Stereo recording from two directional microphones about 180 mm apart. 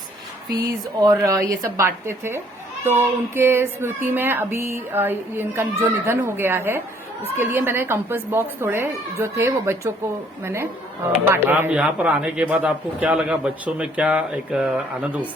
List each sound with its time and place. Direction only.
0.5 s speech: 20° right (ahead or behind); by 15.1 s 5° right (ahead or behind)